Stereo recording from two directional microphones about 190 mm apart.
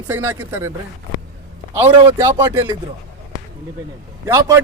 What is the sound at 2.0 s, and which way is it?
Speech, 20° right (ahead or behind).